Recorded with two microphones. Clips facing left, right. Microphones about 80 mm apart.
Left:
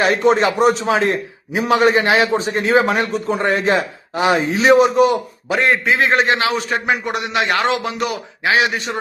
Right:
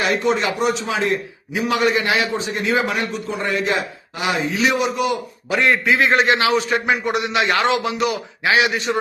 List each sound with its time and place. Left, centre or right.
0.0 s a man's voice: left